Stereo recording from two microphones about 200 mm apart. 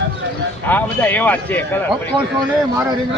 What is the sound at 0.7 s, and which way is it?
Speech, 10° left (ahead or behind).